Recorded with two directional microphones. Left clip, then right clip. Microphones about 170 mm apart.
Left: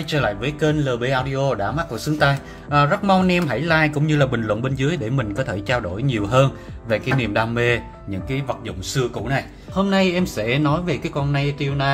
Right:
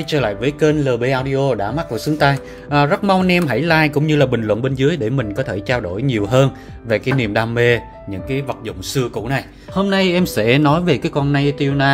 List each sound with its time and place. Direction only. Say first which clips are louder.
0.0 s speech: right 4 dB; 35° right (ahead or behind)
8.6 s speech: right 3 dB; 45° right (ahead or behind)